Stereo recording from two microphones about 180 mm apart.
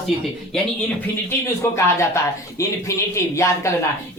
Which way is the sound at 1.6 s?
15° left (ahead or behind).